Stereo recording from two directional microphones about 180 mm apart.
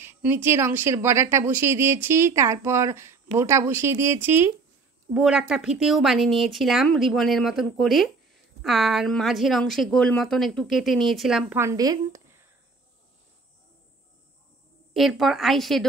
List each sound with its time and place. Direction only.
0.0 s speech: 10° right (ahead or behind)
11.5 s a woman's voice: 15° right (ahead or behind)
15.0 s speech: centre (ahead or behind)